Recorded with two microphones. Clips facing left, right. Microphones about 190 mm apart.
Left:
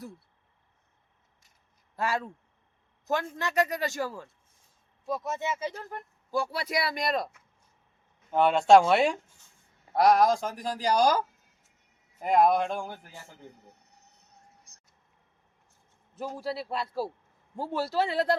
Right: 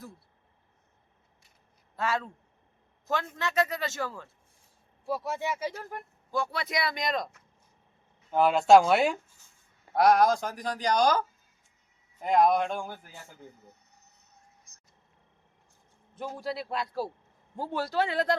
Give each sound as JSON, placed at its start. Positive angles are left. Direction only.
{"t": 2.0, "sound": "speech", "side_deg": 10}
{"t": 3.4, "sound": "speech", "side_deg": 15}
{"t": 5.0, "sound": "speech", "side_deg": -10}
{"t": 6.3, "sound": "speech", "side_deg": 10}
{"t": 8.3, "sound": "speech", "side_deg": 0}
{"t": 14.7, "sound": "vehicle", "side_deg": 35}
{"t": 16.1, "sound": "speech", "side_deg": 0}